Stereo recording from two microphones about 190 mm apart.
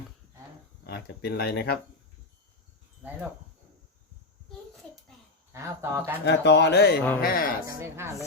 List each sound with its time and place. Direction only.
0.9 s speech: 60° left (ahead or behind)
5.5 s speech: 15° right (ahead or behind)
6.2 s speech: 65° left (ahead or behind)
7.8 s speech: 15° right (ahead or behind)